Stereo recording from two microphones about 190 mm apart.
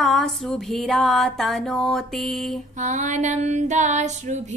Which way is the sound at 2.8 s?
40° right (ahead or behind).